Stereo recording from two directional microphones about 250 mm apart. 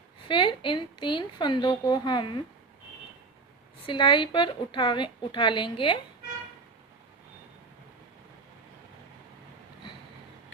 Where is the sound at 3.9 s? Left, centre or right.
Centre.